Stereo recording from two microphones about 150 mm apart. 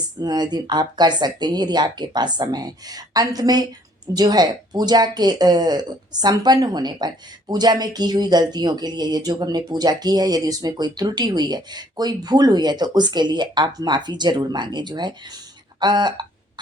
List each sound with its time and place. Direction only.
0.2 s speech: 30° right (ahead or behind)